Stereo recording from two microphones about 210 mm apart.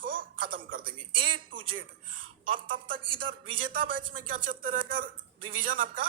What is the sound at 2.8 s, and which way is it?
Speech, 25° right (ahead or behind).